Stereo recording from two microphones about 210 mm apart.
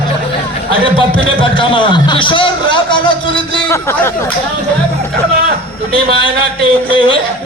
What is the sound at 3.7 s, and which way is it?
Speech, 10° left (ahead or behind).